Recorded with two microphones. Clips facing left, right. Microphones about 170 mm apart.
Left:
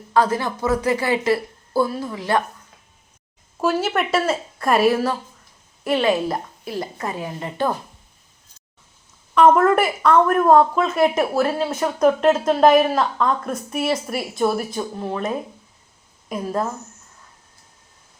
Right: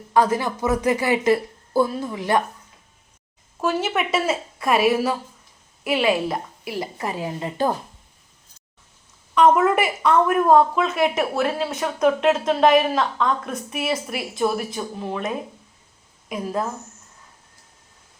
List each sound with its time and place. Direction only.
0.1 s speech: 15° right (ahead or behind)
3.6 s speech: 5° left (ahead or behind)
9.3 s speech: 5° left (ahead or behind)
16.3 s speech: 5° right (ahead or behind)